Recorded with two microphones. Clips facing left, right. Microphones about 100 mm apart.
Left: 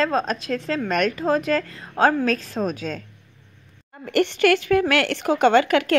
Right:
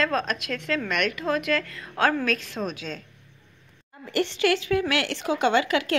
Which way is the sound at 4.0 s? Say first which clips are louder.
Left 5 dB; 60° left (ahead or behind).